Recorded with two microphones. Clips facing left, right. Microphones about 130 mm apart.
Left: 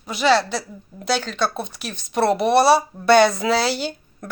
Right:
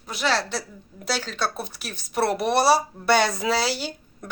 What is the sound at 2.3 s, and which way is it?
A woman's voice, 70° left (ahead or behind).